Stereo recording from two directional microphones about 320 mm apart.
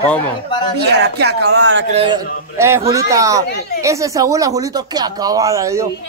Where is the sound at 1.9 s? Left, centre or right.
Centre.